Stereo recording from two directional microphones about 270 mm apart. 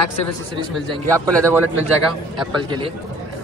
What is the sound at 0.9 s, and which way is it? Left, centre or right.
Speech, centre.